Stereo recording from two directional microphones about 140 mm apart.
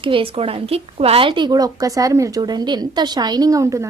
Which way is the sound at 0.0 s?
40° right (ahead or behind).